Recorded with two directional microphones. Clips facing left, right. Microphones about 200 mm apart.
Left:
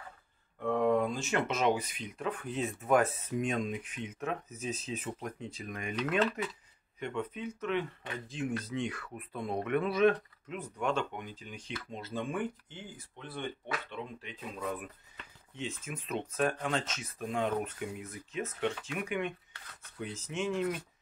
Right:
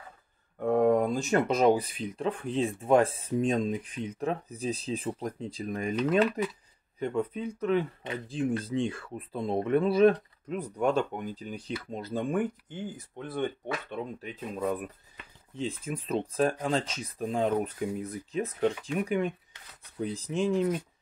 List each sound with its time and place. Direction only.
0.6 s speech: 45° right (ahead or behind)